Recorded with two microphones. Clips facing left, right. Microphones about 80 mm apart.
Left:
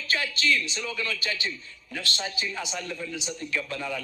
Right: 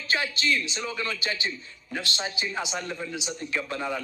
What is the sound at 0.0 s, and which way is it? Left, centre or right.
A man's voice, right.